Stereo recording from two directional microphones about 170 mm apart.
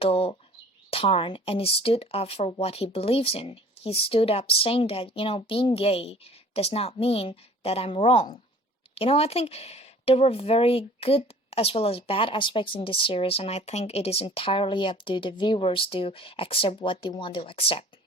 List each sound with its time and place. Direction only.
0.0 s speech: 35° left (ahead or behind)